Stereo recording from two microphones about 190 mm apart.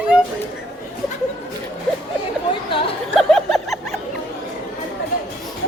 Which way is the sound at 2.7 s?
30° left (ahead or behind).